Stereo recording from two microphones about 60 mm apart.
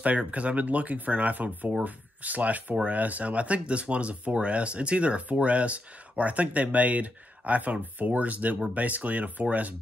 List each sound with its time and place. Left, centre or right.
0.0 s speech: right